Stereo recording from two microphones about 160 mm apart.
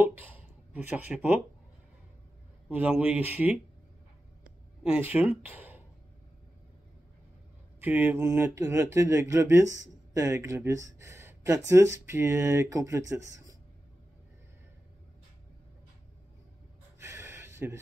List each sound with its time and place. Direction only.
0.0 s speech: 10° right (ahead or behind)
2.7 s speech: 10° right (ahead or behind)
4.8 s speech: 10° right (ahead or behind)
7.8 s speech: 10° right (ahead or behind)
17.0 s a sound: 15° right (ahead or behind)